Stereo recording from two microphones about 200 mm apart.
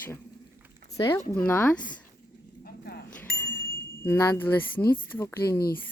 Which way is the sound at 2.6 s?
50° left (ahead or behind).